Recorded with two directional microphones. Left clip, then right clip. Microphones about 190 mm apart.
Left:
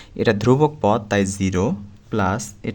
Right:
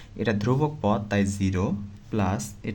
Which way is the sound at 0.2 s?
45° left (ahead or behind).